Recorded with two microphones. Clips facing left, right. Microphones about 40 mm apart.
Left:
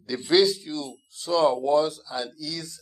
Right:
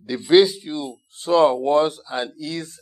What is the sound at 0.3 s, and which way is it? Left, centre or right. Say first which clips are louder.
Speech: right 6 dB; right.